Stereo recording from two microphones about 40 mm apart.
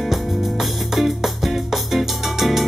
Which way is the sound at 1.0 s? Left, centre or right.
Centre.